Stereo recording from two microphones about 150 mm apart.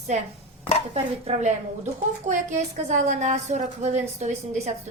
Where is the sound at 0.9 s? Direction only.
45° right (ahead or behind).